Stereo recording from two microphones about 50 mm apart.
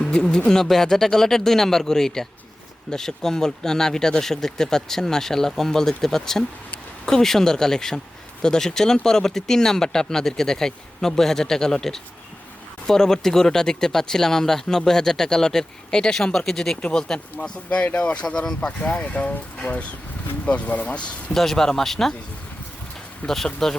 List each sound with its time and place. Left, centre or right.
0.3 s speech: centre
18.9 s speech: left
21.3 s speech: centre
23.2 s speech: centre